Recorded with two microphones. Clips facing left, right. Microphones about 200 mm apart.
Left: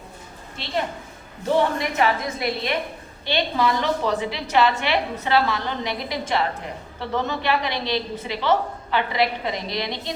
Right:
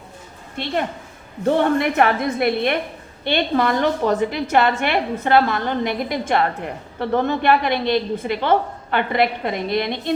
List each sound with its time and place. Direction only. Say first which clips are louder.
0.6 s a woman's voice: right 3 dB; 50° right (ahead or behind)